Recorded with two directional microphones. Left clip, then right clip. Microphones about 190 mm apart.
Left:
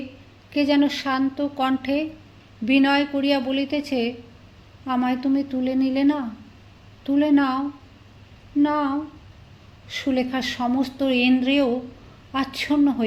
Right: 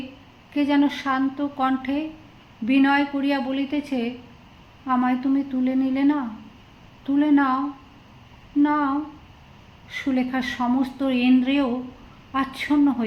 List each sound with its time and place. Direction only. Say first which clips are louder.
0.5 s a woman's voice: left 1 dB; 40° left (ahead or behind)
8.6 s a woman's voice: even; 40° left (ahead or behind)
9.9 s a woman's voice: left 1 dB; 40° left (ahead or behind)